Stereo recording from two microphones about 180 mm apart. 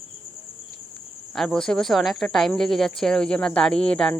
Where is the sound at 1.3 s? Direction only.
5° left (ahead or behind).